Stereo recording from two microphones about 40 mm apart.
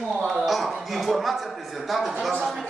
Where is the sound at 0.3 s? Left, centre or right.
Centre.